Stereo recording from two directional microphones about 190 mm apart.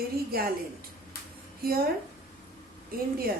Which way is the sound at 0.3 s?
50° right (ahead or behind).